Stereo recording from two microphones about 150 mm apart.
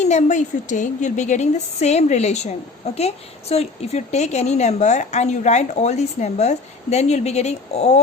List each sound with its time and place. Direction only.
0.0 s a woman's voice: 50° left (ahead or behind)